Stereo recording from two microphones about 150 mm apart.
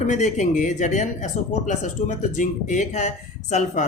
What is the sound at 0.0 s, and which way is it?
Speech, 55° left (ahead or behind).